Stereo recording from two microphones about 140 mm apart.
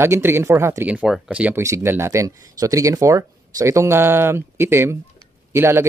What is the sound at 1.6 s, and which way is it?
Speech, 20° right (ahead or behind).